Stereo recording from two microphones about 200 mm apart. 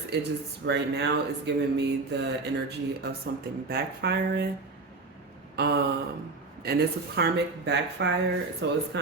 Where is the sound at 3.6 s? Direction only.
50° right (ahead or behind).